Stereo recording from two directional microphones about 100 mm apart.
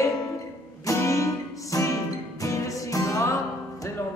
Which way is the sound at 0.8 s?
35° left (ahead or behind).